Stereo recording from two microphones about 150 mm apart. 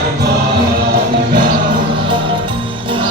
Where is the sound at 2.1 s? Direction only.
35° right (ahead or behind).